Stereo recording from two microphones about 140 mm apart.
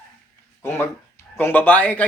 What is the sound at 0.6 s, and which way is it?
Speech, 15° left (ahead or behind).